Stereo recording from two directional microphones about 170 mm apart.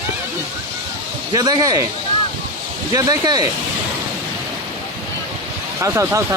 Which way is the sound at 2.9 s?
20° right (ahead or behind).